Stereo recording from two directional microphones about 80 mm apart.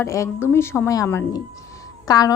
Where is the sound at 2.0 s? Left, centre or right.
Left.